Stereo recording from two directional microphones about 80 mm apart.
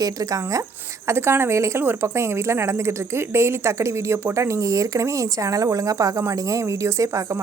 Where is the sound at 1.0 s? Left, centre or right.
Right.